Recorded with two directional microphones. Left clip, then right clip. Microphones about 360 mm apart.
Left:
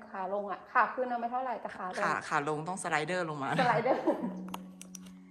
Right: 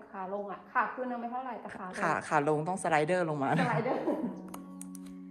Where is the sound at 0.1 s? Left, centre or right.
Left.